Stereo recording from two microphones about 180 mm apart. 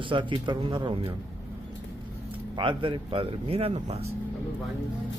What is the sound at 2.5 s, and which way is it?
Speech, 30° right (ahead or behind).